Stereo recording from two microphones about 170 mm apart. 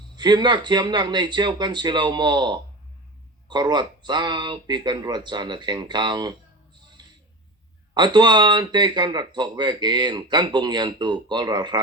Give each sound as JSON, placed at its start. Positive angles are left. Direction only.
{"t": 0.2, "sound": "speech", "side_deg": -25}
{"t": 7.0, "sound": "a sound", "side_deg": -25}
{"t": 7.9, "sound": "speech", "side_deg": -25}